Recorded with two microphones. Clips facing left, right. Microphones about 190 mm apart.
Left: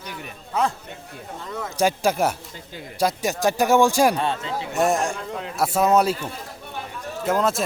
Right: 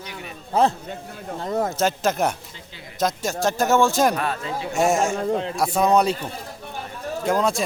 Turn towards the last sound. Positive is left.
turn(degrees=0)  # may be behind; listen again after turning